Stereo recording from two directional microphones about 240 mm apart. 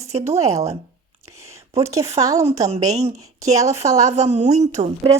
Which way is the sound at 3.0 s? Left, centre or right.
Centre.